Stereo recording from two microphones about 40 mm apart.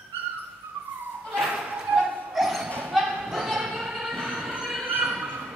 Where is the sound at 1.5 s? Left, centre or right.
Right.